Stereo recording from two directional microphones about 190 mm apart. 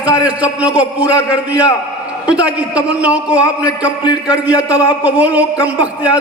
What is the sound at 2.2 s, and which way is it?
A man's voice, 5° right (ahead or behind).